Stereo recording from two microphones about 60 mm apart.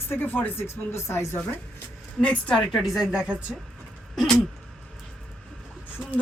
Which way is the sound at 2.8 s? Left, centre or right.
Centre.